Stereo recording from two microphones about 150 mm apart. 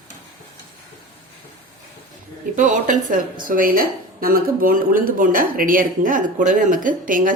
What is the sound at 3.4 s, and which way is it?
Speech, 70° right (ahead or behind).